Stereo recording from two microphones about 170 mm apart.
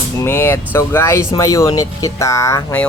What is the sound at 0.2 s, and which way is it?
Speech, 15° left (ahead or behind).